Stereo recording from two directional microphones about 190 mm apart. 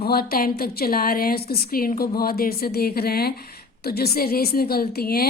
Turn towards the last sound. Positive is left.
turn(degrees=55)  # may be behind; listen again after turning